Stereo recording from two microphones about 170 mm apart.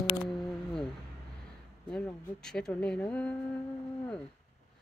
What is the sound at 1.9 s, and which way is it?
Speech, 5° left (ahead or behind).